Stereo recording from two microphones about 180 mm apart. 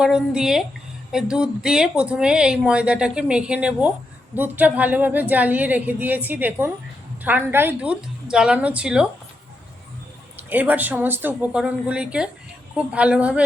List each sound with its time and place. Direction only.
0.0 s a woman's voice: 5° right (ahead or behind)
10.5 s a woman's voice: 10° right (ahead or behind)